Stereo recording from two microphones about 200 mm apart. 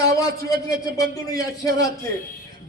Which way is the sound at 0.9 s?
20° left (ahead or behind).